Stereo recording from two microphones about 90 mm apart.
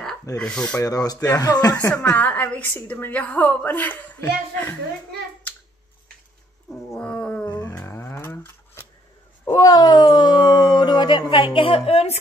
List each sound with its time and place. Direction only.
0.4 s a woman's voice: 10° left (ahead or behind)
0.7 s speech: 45° left (ahead or behind)
2.0 s a woman's voice: 15° left (ahead or behind)
7.0 s roaring cats: 10° left (ahead or behind)
7.7 s a sound: 25° left (ahead or behind)
9.4 s cat: 40° left (ahead or behind); by 10.5 s 55° left (ahead or behind)
10.7 s a sound: 55° left (ahead or behind); by 12.0 s 85° left